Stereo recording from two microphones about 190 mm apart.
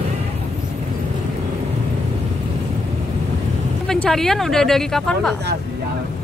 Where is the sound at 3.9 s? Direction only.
Centre (ahead or behind).